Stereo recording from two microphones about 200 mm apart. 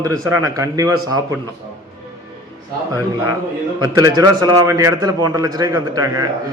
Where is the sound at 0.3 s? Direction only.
15° right (ahead or behind).